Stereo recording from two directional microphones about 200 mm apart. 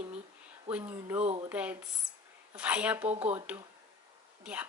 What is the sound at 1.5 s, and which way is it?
Speech, 5° right (ahead or behind).